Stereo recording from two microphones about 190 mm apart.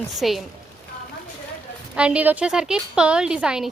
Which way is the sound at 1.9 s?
5° right (ahead or behind).